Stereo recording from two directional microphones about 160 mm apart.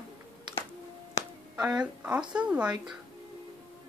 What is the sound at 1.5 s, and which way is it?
Speech, 5° right (ahead or behind).